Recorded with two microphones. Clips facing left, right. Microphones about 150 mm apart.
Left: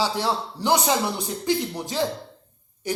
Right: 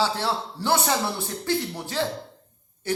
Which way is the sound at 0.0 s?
15° left (ahead or behind).